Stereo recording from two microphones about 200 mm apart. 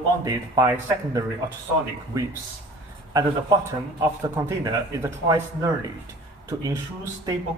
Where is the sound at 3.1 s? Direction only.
20° right (ahead or behind).